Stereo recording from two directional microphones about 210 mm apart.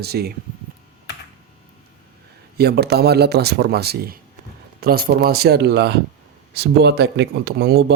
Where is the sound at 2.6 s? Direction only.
50° right (ahead or behind).